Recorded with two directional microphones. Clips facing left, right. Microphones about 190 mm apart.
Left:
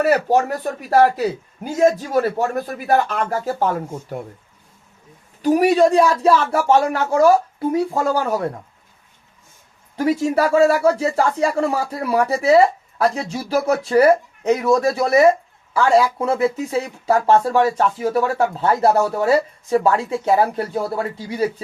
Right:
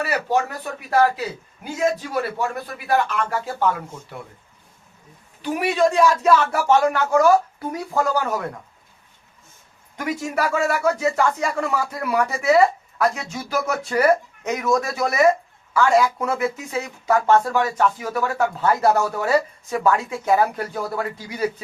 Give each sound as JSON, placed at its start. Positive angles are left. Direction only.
{"t": 0.0, "sound": "speech", "side_deg": 45}
{"t": 2.4, "sound": "speech", "side_deg": 45}
{"t": 5.4, "sound": "speech", "side_deg": 40}
{"t": 9.9, "sound": "speech", "side_deg": 30}